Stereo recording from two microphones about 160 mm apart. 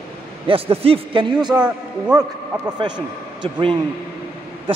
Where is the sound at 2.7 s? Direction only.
30° right (ahead or behind).